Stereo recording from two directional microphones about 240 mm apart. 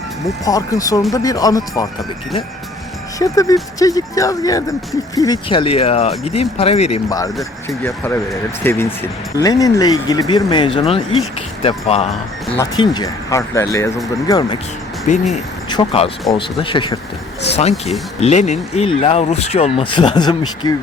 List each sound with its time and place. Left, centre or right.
0.4 s speech: centre
3.2 s speech: centre
7.9 s speech: centre
15.1 s speech: left